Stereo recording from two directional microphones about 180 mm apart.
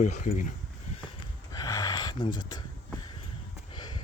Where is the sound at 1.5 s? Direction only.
20° left (ahead or behind).